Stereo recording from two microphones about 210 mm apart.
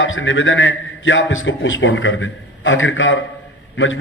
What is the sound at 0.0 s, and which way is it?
A man's voice, 65° left (ahead or behind).